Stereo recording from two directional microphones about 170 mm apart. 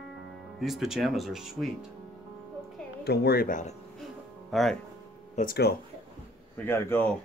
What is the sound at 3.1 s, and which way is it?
Speech, 70° left (ahead or behind).